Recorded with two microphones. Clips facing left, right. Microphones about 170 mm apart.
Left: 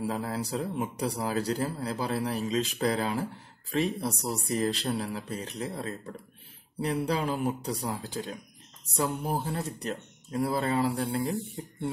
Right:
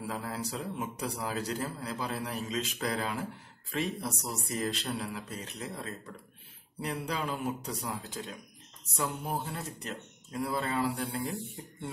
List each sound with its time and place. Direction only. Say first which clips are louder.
0.0 s a man's voice: left 5 dB; 30° left (ahead or behind)